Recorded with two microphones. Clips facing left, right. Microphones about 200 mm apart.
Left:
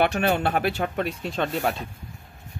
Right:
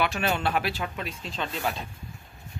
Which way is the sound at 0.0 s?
60° left (ahead or behind).